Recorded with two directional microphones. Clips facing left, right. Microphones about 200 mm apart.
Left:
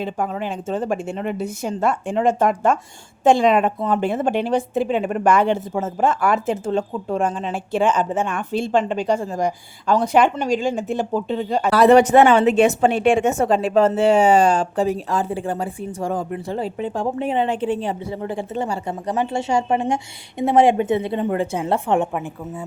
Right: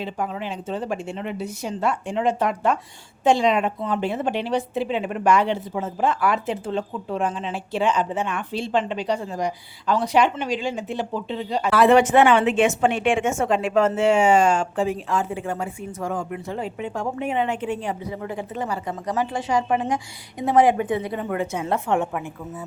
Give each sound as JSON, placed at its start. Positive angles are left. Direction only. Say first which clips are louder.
{"t": 0.0, "sound": "a woman's voice", "louder": "left 4 dB", "side_deg": 50}